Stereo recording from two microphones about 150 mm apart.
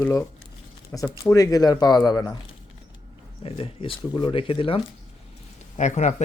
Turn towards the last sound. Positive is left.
turn(degrees=50)  # may be behind; listen again after turning